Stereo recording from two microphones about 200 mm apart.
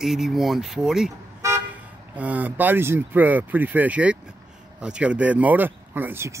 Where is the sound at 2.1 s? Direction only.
5° right (ahead or behind).